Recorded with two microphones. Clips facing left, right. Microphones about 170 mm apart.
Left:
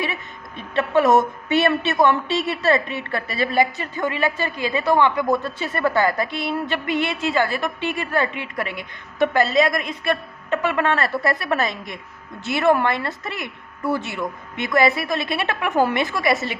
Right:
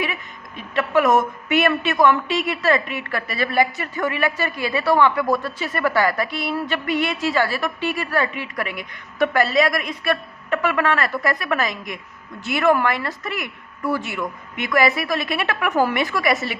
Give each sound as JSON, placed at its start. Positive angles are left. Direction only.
{"t": 0.0, "sound": "a woman's voice", "side_deg": 30}